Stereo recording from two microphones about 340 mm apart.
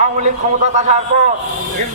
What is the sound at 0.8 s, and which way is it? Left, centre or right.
Speech, centre.